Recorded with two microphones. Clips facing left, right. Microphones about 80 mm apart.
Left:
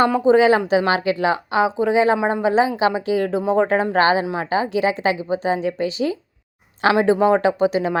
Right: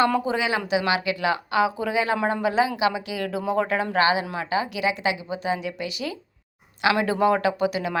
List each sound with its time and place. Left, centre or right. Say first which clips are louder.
0.3 s speech: left 10 dB; left